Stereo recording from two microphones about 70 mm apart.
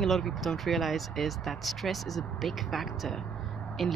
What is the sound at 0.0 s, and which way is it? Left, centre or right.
Speech, centre.